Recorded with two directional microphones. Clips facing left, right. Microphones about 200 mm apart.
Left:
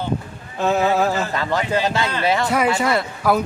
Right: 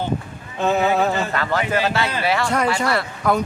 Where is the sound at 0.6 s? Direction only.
Centre (ahead or behind).